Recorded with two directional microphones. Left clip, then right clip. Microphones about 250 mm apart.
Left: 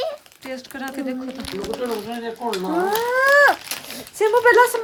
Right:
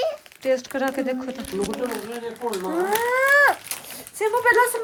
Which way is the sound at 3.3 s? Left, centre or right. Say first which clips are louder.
Left 4 dB; centre.